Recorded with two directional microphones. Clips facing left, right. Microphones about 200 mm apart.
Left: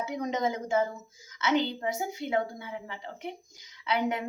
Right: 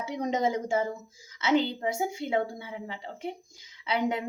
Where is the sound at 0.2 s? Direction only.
30° right (ahead or behind).